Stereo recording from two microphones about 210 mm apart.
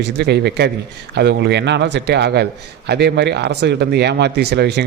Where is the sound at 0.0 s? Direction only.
50° right (ahead or behind).